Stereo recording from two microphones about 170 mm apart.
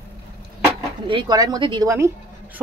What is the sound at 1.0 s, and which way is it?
Speech, 25° right (ahead or behind).